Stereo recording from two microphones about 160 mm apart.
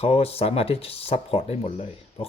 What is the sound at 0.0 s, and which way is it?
Speech, 40° left (ahead or behind).